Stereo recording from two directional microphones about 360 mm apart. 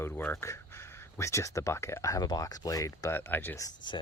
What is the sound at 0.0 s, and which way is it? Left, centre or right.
Speech, centre.